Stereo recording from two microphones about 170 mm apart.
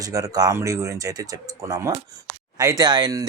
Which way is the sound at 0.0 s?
20° right (ahead or behind).